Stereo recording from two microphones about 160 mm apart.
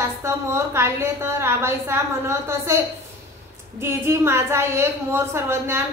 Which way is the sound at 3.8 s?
15° right (ahead or behind).